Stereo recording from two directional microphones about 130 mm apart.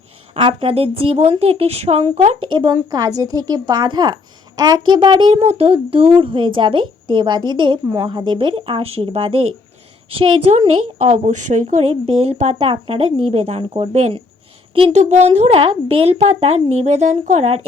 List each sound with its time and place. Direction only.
0.3 s speech: 45° right (ahead or behind)
2.7 s a woman's voice: 25° right (ahead or behind); by 10.5 s 40° right (ahead or behind)
10.9 s a woman's voice: 60° right (ahead or behind)
15.6 s speech: 45° right (ahead or behind); by 17.6 s 65° right (ahead or behind)